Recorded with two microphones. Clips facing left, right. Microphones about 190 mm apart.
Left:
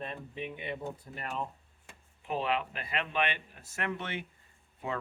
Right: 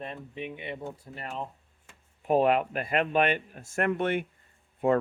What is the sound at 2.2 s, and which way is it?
Speech, 45° right (ahead or behind).